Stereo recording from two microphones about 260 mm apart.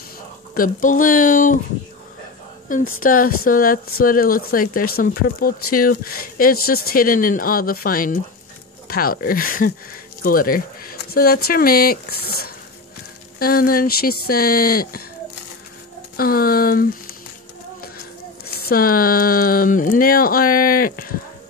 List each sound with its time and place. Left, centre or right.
0.6 s speech: left
3.0 s speech: left
16.2 s speech: left
18.6 s speech: left